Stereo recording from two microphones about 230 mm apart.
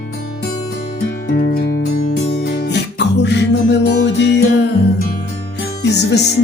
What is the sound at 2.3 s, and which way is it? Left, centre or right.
Music, left.